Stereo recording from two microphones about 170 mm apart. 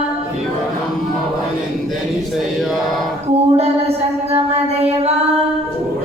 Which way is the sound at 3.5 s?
35° right (ahead or behind).